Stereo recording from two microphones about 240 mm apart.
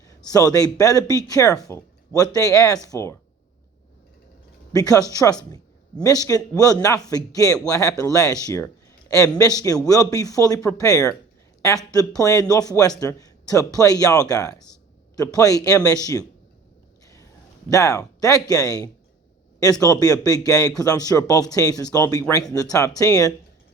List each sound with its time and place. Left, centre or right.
0.3 s speech: centre
4.7 s speech: centre
17.7 s speech: centre